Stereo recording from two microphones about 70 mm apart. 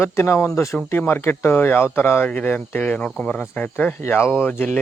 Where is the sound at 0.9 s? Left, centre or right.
Left.